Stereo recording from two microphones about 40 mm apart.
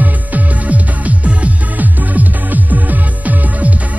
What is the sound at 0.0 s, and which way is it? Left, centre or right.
Music, right.